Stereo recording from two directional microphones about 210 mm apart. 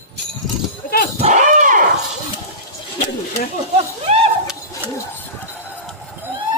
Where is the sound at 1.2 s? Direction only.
35° right (ahead or behind).